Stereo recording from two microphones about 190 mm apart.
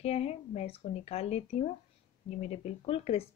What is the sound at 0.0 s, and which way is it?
Speech, 30° left (ahead or behind).